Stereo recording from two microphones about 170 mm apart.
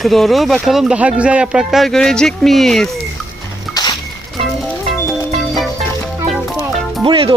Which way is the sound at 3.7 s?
25° left (ahead or behind).